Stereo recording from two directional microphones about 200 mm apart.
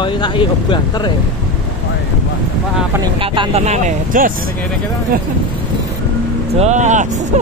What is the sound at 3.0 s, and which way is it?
Speech, 25° right (ahead or behind).